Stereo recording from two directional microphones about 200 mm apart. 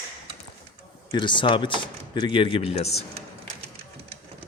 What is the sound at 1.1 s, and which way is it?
Speech, 25° left (ahead or behind).